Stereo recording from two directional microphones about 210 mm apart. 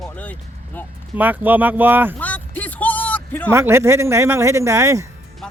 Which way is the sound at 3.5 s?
10° right (ahead or behind).